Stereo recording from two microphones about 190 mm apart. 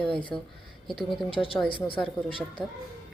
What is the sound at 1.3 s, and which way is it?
Speech, 30° left (ahead or behind).